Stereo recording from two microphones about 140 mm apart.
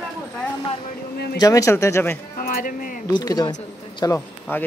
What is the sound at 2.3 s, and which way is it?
Music, 85° left.